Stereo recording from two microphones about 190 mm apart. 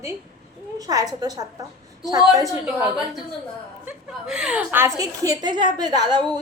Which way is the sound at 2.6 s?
5° right (ahead or behind).